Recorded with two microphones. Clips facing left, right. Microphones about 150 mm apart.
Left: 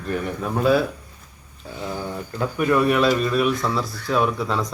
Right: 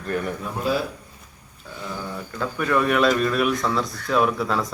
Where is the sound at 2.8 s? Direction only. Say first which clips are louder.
Right 1 dB; centre (ahead or behind).